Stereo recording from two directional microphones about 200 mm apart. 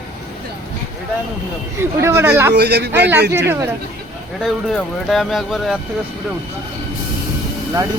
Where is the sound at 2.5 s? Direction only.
55° right (ahead or behind).